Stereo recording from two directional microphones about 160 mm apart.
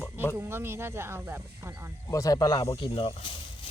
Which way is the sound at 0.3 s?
15° right (ahead or behind).